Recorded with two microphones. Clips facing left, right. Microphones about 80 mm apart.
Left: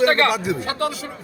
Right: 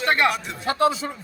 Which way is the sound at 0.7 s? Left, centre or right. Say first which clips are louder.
Right 4 dB; right.